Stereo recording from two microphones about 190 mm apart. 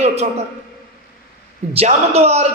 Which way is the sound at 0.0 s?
35° right (ahead or behind).